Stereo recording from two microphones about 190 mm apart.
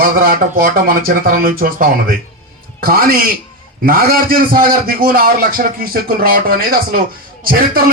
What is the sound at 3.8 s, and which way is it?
A man's voice, 50° right (ahead or behind).